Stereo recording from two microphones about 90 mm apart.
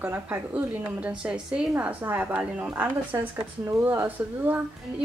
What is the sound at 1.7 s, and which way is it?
A woman's voice, 20° right (ahead or behind).